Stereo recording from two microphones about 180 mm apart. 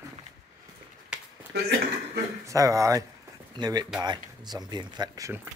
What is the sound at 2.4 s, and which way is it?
Speech, 20° right (ahead or behind).